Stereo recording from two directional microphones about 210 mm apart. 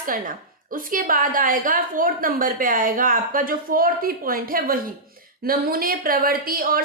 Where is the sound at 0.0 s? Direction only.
40° right (ahead or behind).